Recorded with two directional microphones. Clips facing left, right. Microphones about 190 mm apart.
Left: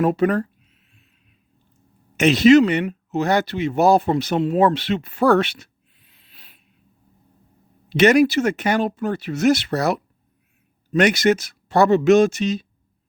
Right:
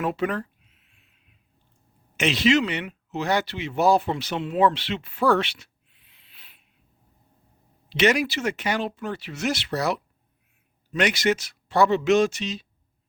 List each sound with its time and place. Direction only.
0.0 s a sound: 40° left (ahead or behind)
2.1 s speech: 45° left (ahead or behind)
7.9 s speech: 50° left (ahead or behind)